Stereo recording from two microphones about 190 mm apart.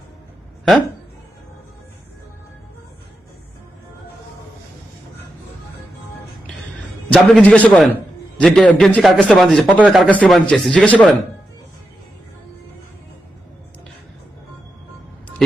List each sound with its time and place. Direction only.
7.1 s a man's voice: 5° left (ahead or behind)
15.4 s speech: centre (ahead or behind)